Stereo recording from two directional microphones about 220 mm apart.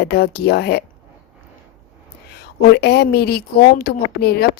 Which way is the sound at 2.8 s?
50° left (ahead or behind).